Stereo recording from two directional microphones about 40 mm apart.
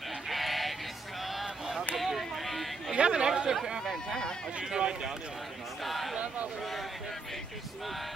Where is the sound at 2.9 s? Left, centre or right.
Right.